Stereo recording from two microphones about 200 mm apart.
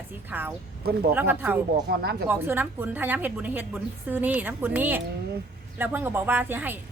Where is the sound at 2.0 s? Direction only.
50° right (ahead or behind).